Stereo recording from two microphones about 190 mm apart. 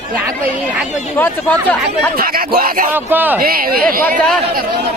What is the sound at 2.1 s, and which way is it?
Speech, 50° right (ahead or behind).